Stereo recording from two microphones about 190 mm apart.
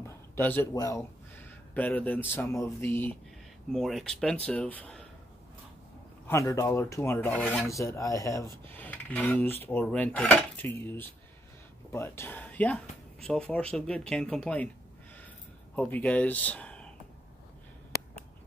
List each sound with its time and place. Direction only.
0.0 s speech: 10° left (ahead or behind)
6.2 s speech: 15° left (ahead or behind)
8.6 s a sound: 10° left (ahead or behind)
9.7 s speech: 10° left (ahead or behind)
15.7 s speech: 10° left (ahead or behind)